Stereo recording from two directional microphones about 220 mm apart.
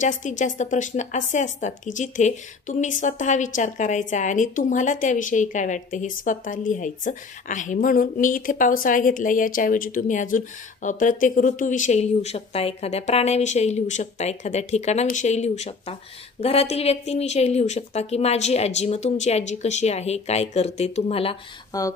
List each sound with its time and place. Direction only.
0.0 s a woman's voice: 35° left (ahead or behind)
21.7 s speech: 15° left (ahead or behind)